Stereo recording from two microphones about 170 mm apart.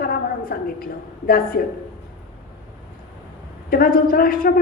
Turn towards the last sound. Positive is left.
turn(degrees=60)  # may be behind; listen again after turning